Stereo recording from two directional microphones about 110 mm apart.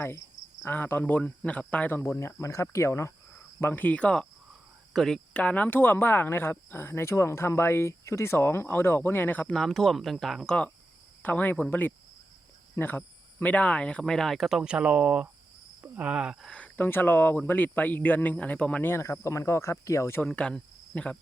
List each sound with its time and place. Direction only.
0.6 s speech: 20° left (ahead or behind)
2.0 s speech: 25° left (ahead or behind); by 16.5 s 5° right (ahead or behind)
16.5 s speech: 10° left (ahead or behind)
20.2 s speech: 5° left (ahead or behind)